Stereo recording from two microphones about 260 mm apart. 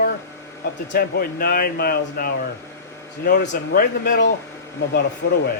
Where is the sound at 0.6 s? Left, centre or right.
Left.